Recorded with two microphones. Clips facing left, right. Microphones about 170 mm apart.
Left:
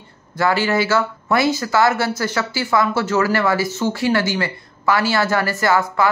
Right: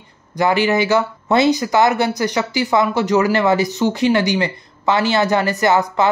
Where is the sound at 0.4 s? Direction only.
20° right (ahead or behind).